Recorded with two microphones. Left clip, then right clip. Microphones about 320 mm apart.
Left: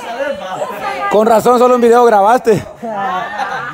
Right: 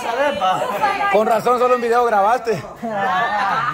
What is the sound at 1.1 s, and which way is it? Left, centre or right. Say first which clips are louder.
A man's voice: left 10 dB; centre.